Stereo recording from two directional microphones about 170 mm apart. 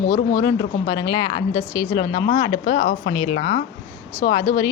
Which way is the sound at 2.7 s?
55° left (ahead or behind).